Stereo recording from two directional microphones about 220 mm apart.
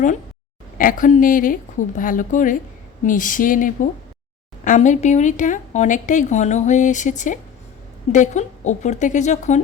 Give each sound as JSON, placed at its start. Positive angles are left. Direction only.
{"t": 0.8, "sound": "a woman's voice", "side_deg": 40}